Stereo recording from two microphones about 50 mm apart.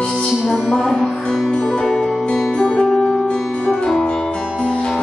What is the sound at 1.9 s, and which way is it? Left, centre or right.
Music, centre.